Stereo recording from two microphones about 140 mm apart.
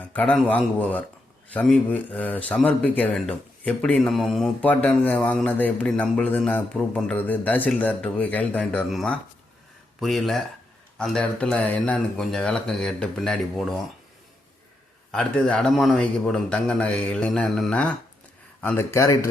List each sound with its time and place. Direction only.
0.0 s a man's voice: 10° left (ahead or behind)
15.1 s a man's voice: 5° left (ahead or behind)